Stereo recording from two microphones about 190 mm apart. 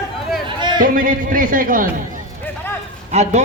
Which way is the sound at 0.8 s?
45° right (ahead or behind).